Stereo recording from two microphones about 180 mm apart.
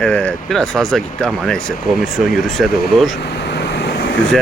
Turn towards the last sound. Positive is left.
turn(degrees=65)  # may be behind; listen again after turning